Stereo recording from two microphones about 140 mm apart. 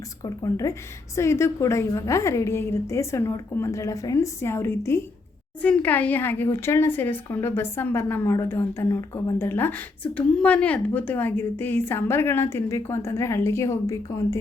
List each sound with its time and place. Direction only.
0.5 s a woman's voice: 20° left (ahead or behind)